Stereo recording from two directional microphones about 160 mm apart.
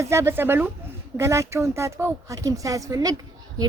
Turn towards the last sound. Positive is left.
turn(degrees=-25)  # may be behind; listen again after turning